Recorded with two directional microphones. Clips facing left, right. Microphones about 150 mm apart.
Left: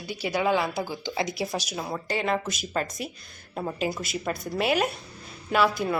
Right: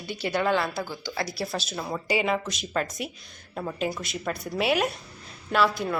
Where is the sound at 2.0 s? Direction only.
5° right (ahead or behind).